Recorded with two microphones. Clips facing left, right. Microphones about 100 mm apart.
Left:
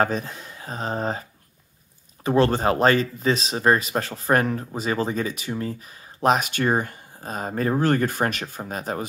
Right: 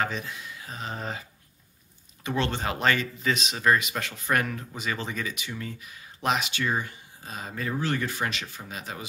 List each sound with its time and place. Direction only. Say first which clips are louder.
0.0 s speech: left 7 dB; 40° left (ahead or behind)
2.2 s speech: left 9 dB; 40° left (ahead or behind)